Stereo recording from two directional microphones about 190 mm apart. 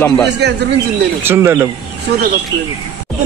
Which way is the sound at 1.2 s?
10° right (ahead or behind).